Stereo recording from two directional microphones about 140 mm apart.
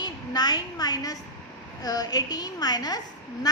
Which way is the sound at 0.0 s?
30° left (ahead or behind).